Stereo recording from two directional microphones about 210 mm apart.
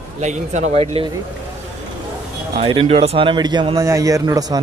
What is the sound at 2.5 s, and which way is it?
Speech, 25° right (ahead or behind).